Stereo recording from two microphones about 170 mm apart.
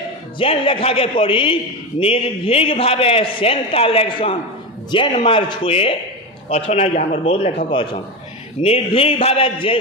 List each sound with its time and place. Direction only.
0.4 s a man's voice: 35° left (ahead or behind)
7.7 s a man's voice: 25° left (ahead or behind)